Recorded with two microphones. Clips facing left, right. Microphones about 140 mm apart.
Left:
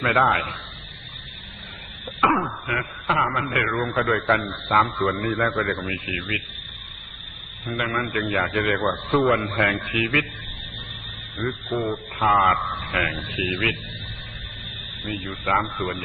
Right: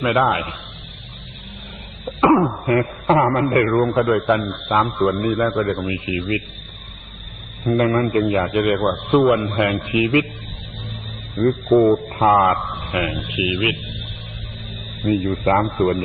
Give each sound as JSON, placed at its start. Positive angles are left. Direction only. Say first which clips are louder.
{"t": 0.0, "sound": "a man's voice", "louder": "right 3 dB", "side_deg": -20}
{"t": 2.0, "sound": "cough", "louder": "right 7 dB", "side_deg": -25}
{"t": 2.6, "sound": "a man's voice", "louder": "right 10 dB", "side_deg": -40}
{"t": 7.6, "sound": "a man's voice", "louder": "right 10 dB", "side_deg": -25}
{"t": 11.4, "sound": "a man's voice", "louder": "right 12 dB", "side_deg": -25}
{"t": 12.5, "sound": "a man's voice", "louder": "right 3 dB", "side_deg": -20}
{"t": 15.1, "sound": "a man's voice", "louder": "right 12 dB", "side_deg": -25}
{"t": 15.4, "sound": "speech", "louder": "right 6 dB", "side_deg": -35}
{"t": 15.8, "sound": "a man's voice", "louder": "right 10 dB", "side_deg": -25}